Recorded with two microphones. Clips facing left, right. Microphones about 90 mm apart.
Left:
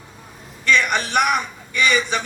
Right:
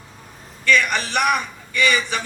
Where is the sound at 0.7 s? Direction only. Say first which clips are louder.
Even; 20° left (ahead or behind).